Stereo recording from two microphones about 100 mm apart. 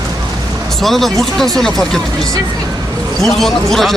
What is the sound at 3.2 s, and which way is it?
Speech, 5° left (ahead or behind).